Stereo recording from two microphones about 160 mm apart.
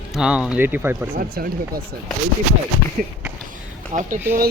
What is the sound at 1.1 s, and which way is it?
Speech, 70° right (ahead or behind).